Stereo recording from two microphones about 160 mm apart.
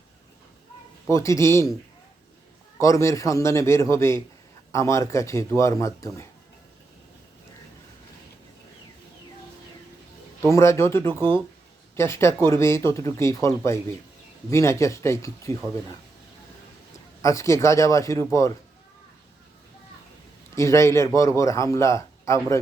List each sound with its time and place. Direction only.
1.1 s speech: 20° left (ahead or behind)
2.7 s speech: 20° left (ahead or behind)
10.5 s a man's voice: 15° left (ahead or behind)
17.2 s speech: 20° left (ahead or behind)
20.6 s a man's voice: 15° left (ahead or behind)